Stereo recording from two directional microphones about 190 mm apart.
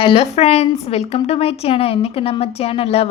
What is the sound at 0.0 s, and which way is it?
A woman's voice, 30° left (ahead or behind).